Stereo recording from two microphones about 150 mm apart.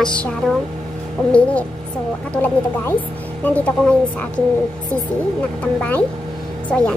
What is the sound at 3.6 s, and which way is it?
Speech, 10° left (ahead or behind).